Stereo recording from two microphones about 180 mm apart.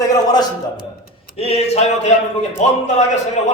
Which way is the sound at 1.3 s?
35° left (ahead or behind).